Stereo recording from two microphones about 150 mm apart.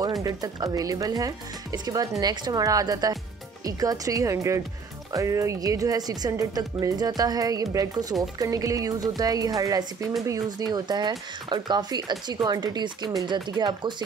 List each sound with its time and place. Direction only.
0.2 s speech: 25° right (ahead or behind)